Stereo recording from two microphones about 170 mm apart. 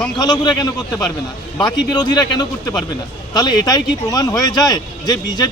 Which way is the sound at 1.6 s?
25° left (ahead or behind).